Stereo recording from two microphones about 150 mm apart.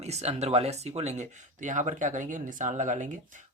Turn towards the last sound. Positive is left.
turn(degrees=-55)  # may be behind; listen again after turning